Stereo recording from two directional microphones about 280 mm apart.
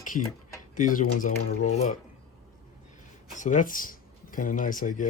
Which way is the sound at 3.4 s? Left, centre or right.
Left.